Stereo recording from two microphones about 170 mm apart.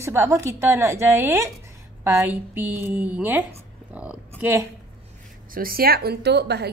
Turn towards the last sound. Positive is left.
turn(degrees=-75)  # may be behind; listen again after turning